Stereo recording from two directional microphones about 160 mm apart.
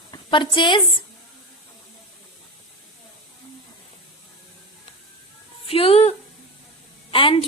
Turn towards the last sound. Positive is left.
turn(degrees=35)  # may be behind; listen again after turning